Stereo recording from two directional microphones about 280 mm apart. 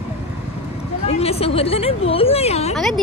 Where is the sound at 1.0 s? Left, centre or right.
Left.